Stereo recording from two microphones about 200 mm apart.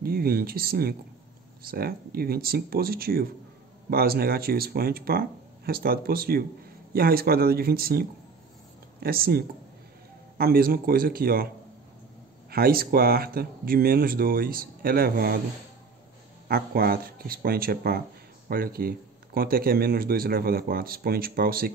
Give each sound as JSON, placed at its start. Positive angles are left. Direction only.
{"t": 0.0, "sound": "speech", "side_deg": -50}
{"t": 12.4, "sound": "speech", "side_deg": -50}
{"t": 16.4, "sound": "speech", "side_deg": -50}